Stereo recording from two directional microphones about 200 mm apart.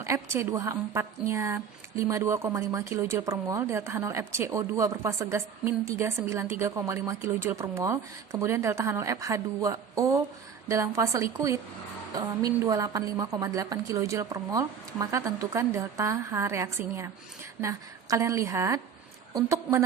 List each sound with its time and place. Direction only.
0.0 s speech: 15° right (ahead or behind)